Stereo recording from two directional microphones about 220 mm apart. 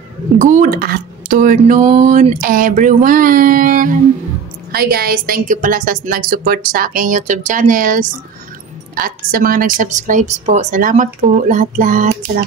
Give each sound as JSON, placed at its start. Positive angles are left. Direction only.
{"t": 0.4, "sound": "speech", "side_deg": -35}